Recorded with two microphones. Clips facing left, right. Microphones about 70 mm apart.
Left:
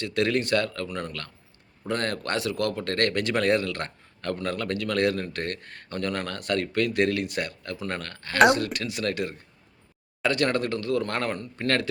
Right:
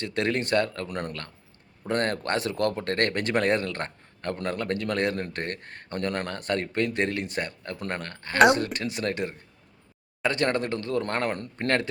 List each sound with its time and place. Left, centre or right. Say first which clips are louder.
0.0 s speech: left 2 dB; right
0.9 s speech: right 1 dB; right
1.9 s speech: right 2 dB; right